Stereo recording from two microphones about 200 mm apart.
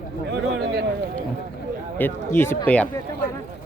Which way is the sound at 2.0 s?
10° left (ahead or behind).